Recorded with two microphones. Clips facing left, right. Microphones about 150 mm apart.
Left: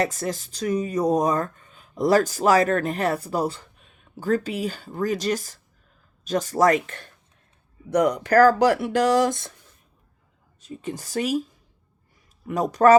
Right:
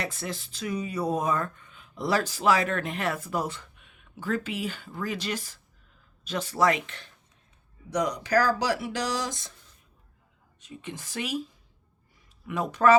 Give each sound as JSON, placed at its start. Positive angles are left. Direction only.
{"t": 0.0, "sound": "speech", "side_deg": 40}
{"t": 10.6, "sound": "speech", "side_deg": 40}
{"t": 12.5, "sound": "speech", "side_deg": 40}